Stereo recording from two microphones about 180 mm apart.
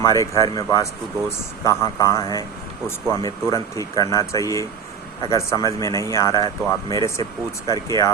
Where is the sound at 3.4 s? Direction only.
20° left (ahead or behind).